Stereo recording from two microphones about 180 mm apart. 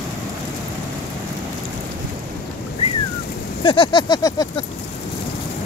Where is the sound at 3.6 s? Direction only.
30° left (ahead or behind).